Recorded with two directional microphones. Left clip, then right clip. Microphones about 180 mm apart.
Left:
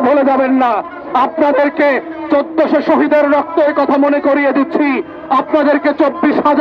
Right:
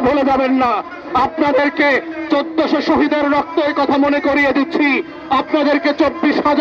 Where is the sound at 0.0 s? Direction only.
45° left (ahead or behind).